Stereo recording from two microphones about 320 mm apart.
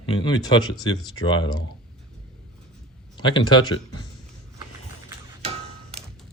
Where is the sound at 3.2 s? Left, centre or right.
Centre.